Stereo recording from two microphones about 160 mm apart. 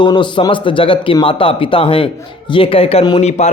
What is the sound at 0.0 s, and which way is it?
A man's voice, 30° left (ahead or behind).